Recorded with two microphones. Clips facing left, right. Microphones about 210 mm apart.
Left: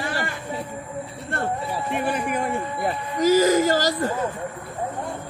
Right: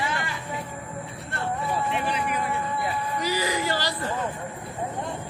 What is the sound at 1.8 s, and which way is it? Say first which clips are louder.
A man's voice: left 3 dB; 50° left (ahead or behind).